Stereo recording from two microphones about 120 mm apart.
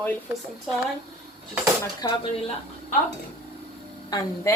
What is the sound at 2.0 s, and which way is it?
Speech, 35° left (ahead or behind).